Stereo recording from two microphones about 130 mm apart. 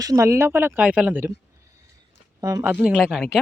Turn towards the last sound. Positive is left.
turn(degrees=0)  # may be behind; listen again after turning